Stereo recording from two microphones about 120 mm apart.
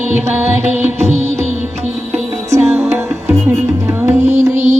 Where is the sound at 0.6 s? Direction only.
70° right (ahead or behind).